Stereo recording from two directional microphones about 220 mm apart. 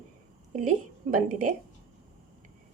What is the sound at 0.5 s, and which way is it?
A woman's voice, 35° right (ahead or behind).